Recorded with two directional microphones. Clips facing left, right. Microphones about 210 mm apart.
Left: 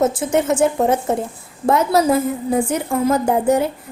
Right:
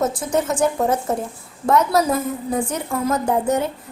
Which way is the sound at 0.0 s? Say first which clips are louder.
Left 4 dB; 25° left (ahead or behind).